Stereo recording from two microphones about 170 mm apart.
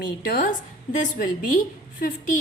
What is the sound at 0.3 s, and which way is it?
A woman's voice, 55° left (ahead or behind).